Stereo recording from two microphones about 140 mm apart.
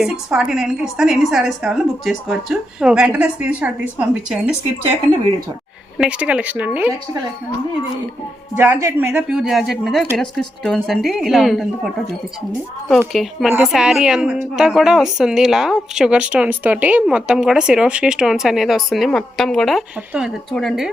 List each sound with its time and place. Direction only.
0.0 s speech: 5° right (ahead or behind)
6.0 s speech: 10° right (ahead or behind)
8.5 s speech: 15° right (ahead or behind)
9.3 s speech: centre (ahead or behind)
13.2 s speech: centre (ahead or behind)